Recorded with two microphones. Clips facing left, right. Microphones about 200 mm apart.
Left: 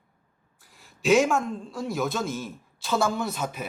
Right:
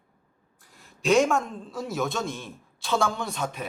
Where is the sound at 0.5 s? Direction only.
Centre (ahead or behind).